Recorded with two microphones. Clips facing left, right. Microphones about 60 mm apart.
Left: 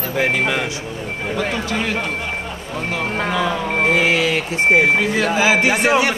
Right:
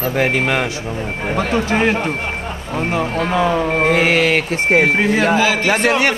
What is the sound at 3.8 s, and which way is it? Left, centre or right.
Speech, right.